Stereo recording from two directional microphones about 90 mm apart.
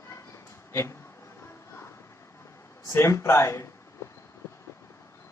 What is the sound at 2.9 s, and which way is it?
Speech, 35° left (ahead or behind).